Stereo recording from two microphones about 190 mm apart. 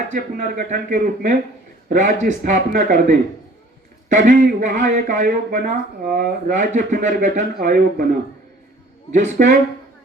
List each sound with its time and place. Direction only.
0.1 s a man's voice: 45° right (ahead or behind)
1.9 s a man's voice: 40° right (ahead or behind)
4.3 s a man's voice: 40° right (ahead or behind)
9.1 s a man's voice: 40° right (ahead or behind)